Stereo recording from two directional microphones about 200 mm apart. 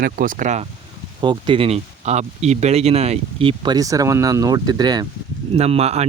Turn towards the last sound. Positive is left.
turn(degrees=-30)  # may be behind; listen again after turning